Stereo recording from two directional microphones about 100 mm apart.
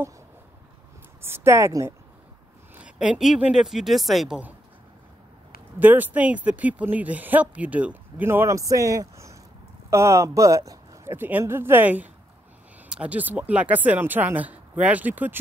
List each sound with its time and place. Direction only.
1.2 s speech: 25° right (ahead or behind)
2.7 s speech: 10° right (ahead or behind)
5.8 s speech: 15° right (ahead or behind); by 11.1 s 35° right (ahead or behind)
11.1 s speech: 20° right (ahead or behind)